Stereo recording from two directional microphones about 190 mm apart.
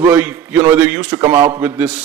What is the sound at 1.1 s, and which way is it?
Speech, 20° right (ahead or behind).